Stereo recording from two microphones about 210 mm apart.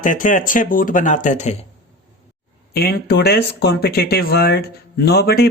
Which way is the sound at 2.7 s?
50° left (ahead or behind).